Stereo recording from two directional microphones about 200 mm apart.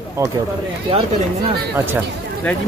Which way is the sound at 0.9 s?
30° right (ahead or behind).